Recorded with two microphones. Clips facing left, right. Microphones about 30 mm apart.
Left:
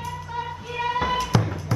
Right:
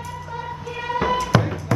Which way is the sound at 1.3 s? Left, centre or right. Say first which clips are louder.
Right 4 dB; right.